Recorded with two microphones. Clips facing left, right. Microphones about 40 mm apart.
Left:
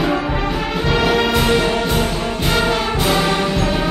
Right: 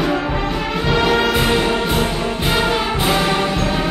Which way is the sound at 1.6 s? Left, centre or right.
Centre.